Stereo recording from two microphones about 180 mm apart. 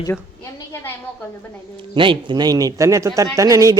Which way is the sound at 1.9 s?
30° right (ahead or behind).